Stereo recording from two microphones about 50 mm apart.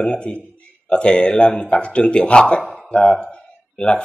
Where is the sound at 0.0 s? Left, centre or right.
Centre.